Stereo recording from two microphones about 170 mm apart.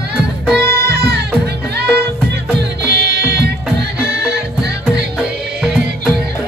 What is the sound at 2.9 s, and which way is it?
Music, 75° right (ahead or behind).